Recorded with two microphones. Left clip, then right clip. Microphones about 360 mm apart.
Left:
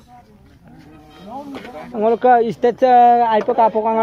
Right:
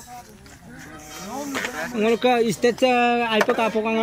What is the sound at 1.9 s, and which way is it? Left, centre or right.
Speech, centre.